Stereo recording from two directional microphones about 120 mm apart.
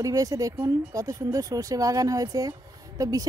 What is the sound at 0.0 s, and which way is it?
Speech, 30° right (ahead or behind).